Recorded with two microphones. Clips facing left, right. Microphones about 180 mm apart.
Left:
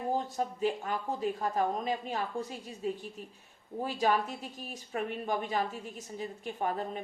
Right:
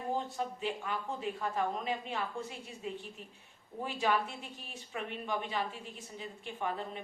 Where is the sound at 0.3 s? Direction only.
40° left (ahead or behind).